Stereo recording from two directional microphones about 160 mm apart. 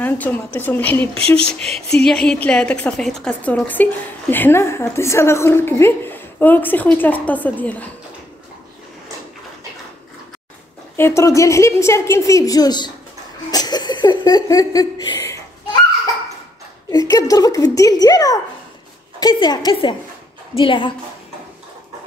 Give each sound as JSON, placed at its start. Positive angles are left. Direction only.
{"t": 0.0, "sound": "a woman's voice", "side_deg": 10}
{"t": 1.1, "sound": "speech", "side_deg": -35}
{"t": 1.5, "sound": "a woman's voice", "side_deg": 5}
{"t": 11.0, "sound": "a woman's voice", "side_deg": 15}
{"t": 17.1, "sound": "a woman's voice", "side_deg": 20}